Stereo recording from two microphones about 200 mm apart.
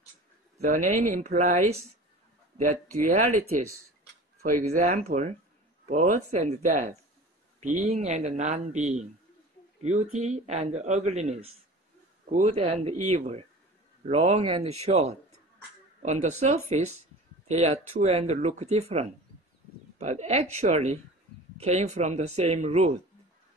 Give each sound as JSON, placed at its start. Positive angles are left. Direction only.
{"t": 0.7, "sound": "speech", "side_deg": -40}
{"t": 10.1, "sound": "speech", "side_deg": -35}